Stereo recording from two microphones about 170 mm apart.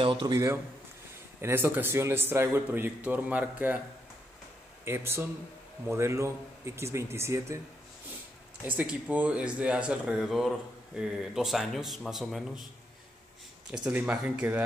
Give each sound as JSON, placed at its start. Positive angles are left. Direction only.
{"t": 0.0, "sound": "speech", "side_deg": -25}
{"t": 4.8, "sound": "speech", "side_deg": -15}
{"t": 8.6, "sound": "speech", "side_deg": -10}
{"t": 13.8, "sound": "speech", "side_deg": -5}